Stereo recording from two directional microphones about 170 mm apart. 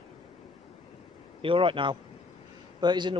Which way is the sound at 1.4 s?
30° right (ahead or behind).